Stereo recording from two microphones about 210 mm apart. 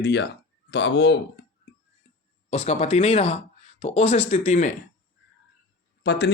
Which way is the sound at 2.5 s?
30° left (ahead or behind).